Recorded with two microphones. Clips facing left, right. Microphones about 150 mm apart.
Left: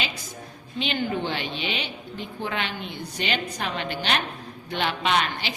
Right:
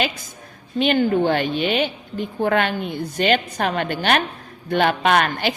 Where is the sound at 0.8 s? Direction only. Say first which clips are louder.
Right 9 dB; 50° right (ahead or behind).